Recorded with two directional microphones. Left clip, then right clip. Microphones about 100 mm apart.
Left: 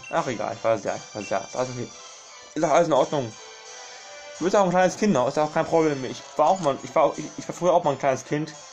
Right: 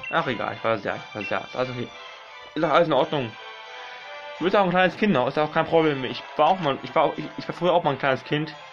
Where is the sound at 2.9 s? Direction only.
50° right (ahead or behind).